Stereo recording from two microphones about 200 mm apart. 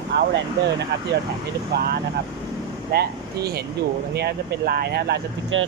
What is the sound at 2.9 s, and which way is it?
Speech, 50° right (ahead or behind).